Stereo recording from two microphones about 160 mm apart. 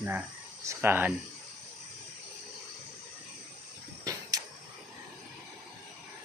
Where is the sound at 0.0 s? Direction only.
10° right (ahead or behind).